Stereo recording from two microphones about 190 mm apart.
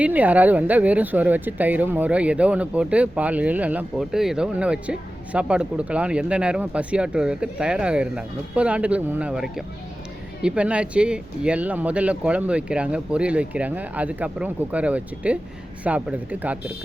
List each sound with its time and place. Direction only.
0.0 s speech: 10° right (ahead or behind)